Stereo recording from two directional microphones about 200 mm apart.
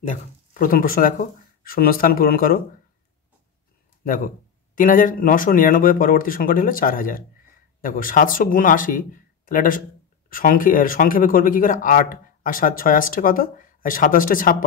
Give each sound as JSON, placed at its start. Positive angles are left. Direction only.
{"t": 0.0, "sound": "speech", "side_deg": 35}
{"t": 4.0, "sound": "speech", "side_deg": 45}